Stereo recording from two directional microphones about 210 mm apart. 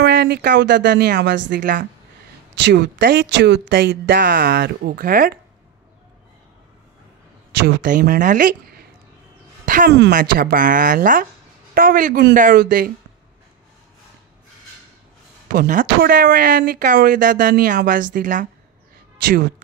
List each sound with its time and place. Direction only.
0.0 s a woman's voice: 55° right (ahead or behind)
2.6 s speech: 55° right (ahead or behind)
7.6 s speech: 45° right (ahead or behind)
15.4 s speech: 40° right (ahead or behind)